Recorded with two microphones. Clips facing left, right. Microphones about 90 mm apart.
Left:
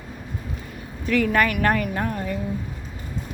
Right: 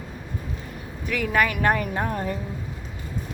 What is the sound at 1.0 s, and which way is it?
Speech, 10° right (ahead or behind).